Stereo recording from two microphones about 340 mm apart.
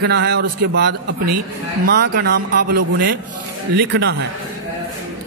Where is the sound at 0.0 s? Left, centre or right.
Right.